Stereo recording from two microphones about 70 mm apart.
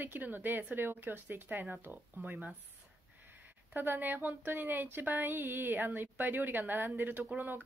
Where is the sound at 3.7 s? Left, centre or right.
Right.